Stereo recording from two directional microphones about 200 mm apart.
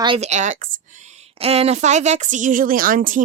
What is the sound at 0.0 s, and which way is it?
A woman's voice, 30° right (ahead or behind).